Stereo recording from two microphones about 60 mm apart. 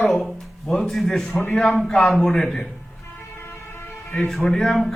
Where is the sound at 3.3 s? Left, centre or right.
Left.